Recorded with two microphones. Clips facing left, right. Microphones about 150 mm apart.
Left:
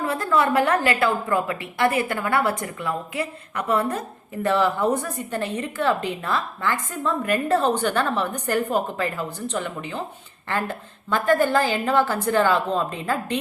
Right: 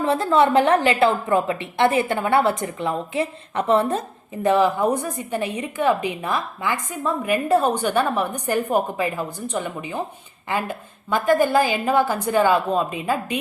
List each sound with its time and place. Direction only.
0.0 s a woman's voice: 25° right (ahead or behind)